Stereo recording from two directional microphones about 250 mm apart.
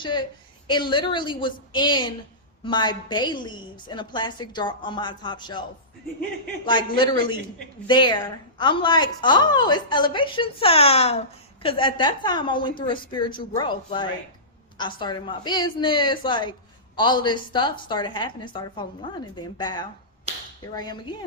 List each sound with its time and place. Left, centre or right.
0.0 s a woman's voice: centre
6.7 s a woman's voice: centre
20.3 s a sound: right
20.7 s a woman's voice: centre